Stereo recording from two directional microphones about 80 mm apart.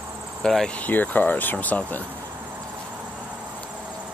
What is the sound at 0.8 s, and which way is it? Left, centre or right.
Speech, left.